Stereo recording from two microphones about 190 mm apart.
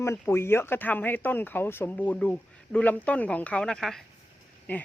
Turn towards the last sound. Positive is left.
turn(degrees=10)  # may be behind; listen again after turning